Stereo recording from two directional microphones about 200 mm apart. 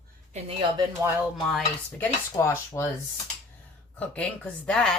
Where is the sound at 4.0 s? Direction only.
5° left (ahead or behind).